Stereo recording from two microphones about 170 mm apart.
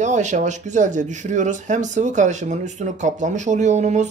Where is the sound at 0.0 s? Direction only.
45° right (ahead or behind).